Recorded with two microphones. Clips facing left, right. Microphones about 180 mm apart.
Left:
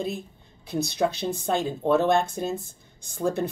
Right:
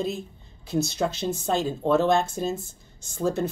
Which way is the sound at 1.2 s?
15° left (ahead or behind).